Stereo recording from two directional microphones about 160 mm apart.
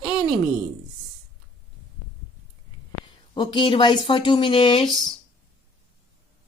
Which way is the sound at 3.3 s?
30° left (ahead or behind).